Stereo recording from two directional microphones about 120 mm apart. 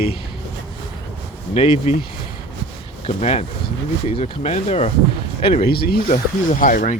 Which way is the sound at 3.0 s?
65° left (ahead or behind).